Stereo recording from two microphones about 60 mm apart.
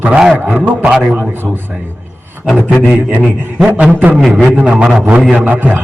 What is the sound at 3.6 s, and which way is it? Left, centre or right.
A man's voice, right.